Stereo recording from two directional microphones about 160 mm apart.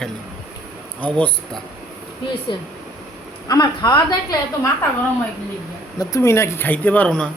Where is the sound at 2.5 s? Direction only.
30° left (ahead or behind).